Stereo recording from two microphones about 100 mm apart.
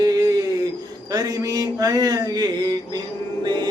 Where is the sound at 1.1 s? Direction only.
40° right (ahead or behind).